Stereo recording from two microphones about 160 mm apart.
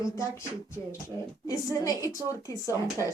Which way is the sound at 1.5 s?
20° left (ahead or behind).